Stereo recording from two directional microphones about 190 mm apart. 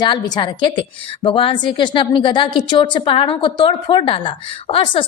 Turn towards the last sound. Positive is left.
turn(degrees=25)  # may be behind; listen again after turning